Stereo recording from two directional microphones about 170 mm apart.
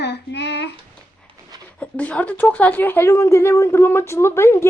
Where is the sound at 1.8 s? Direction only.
10° left (ahead or behind).